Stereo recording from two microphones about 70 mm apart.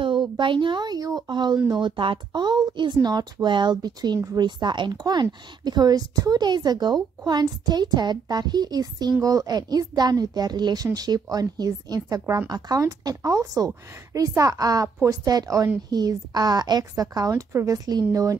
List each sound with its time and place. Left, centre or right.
0.7 s speech: right
9.2 s speech: right
15.9 s speech: right
17.5 s speech: right
17.7 s speech: right